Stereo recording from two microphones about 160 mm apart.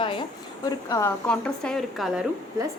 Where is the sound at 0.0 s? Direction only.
30° left (ahead or behind).